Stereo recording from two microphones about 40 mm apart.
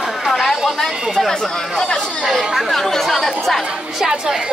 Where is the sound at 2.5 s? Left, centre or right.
Centre.